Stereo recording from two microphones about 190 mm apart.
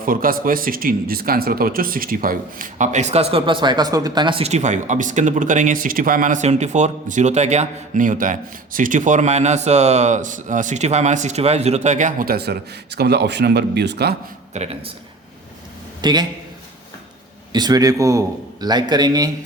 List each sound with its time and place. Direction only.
0.0 s speech: 50° right (ahead or behind)
14.5 s speech: 35° right (ahead or behind)
16.0 s a man's voice: 20° right (ahead or behind)
17.5 s a man's voice: 20° right (ahead or behind)